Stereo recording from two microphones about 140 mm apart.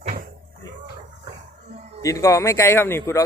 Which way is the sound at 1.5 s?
55° right (ahead or behind).